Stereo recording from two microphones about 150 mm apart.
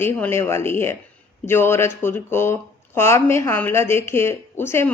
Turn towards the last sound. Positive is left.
turn(degrees=15)  # may be behind; listen again after turning